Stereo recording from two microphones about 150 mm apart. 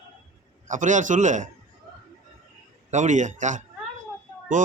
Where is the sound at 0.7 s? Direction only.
55° right (ahead or behind).